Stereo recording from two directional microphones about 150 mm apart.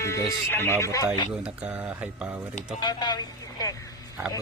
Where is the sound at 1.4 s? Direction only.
10° right (ahead or behind).